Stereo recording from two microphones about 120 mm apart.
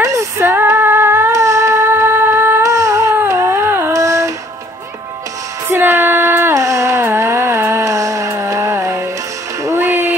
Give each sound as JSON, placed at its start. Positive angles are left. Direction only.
{"t": 0.0, "sound": "female singing", "side_deg": -25}
{"t": 5.7, "sound": "a sound", "side_deg": -20}
{"t": 9.6, "sound": "music", "side_deg": -25}